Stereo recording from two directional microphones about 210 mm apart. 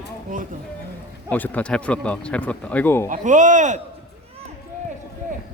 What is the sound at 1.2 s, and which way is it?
Speech, 5° left (ahead or behind).